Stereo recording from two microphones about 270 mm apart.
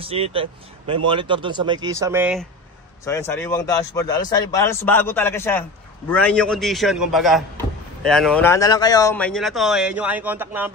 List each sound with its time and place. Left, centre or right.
0.0 s speech: centre
3.1 s a man's voice: centre